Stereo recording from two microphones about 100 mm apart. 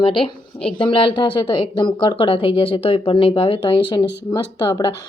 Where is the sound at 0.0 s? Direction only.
60° left (ahead or behind).